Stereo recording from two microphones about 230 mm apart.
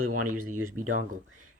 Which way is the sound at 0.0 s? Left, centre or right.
Right.